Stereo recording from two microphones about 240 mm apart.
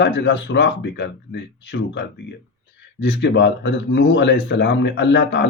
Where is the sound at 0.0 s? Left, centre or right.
Left.